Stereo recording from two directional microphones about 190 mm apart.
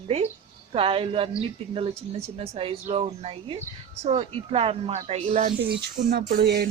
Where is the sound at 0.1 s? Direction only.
35° right (ahead or behind).